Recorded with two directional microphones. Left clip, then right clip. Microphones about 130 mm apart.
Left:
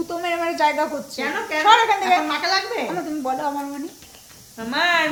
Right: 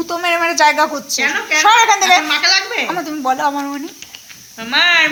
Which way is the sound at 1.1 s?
35° left (ahead or behind).